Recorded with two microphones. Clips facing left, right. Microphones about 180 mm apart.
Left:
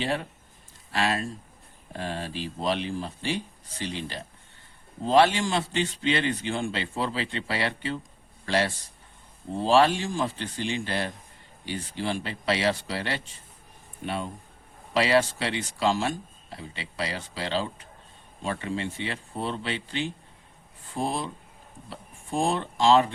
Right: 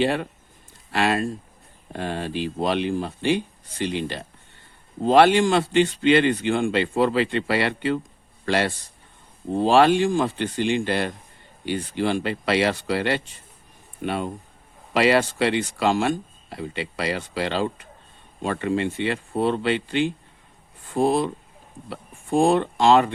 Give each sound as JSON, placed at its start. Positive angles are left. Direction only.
{"t": 0.0, "sound": "a man's voice", "side_deg": -60}